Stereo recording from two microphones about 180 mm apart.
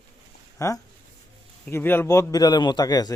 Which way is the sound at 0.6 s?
15° left (ahead or behind).